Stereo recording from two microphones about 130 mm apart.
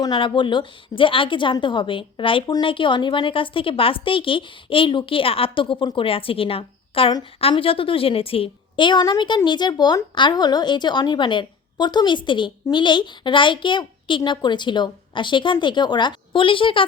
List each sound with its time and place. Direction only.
0.0 s a woman's voice: 35° left (ahead or behind)